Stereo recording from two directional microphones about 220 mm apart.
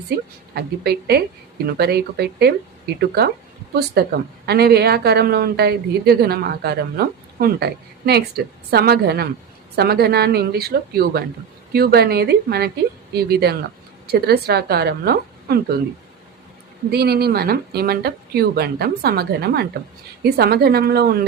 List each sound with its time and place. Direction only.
0.1 s a woman's voice: 45° right (ahead or behind)
16.9 s a woman's voice: 45° right (ahead or behind)